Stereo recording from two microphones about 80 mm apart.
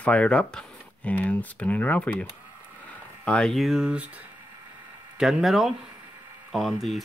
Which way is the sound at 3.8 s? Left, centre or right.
Centre.